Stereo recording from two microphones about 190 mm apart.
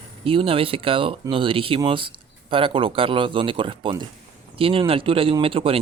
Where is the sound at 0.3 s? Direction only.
30° right (ahead or behind).